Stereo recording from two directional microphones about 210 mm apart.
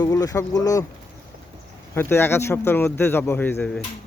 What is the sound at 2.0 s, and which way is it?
A man's voice, 10° left (ahead or behind).